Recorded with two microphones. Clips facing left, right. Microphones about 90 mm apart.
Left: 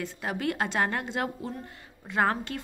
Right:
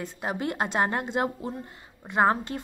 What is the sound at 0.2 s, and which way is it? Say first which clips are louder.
A woman's voice: right 1 dB; 30° right (ahead or behind).